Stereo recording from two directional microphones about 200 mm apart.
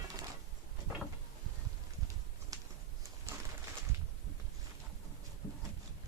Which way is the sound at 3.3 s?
15° right (ahead or behind).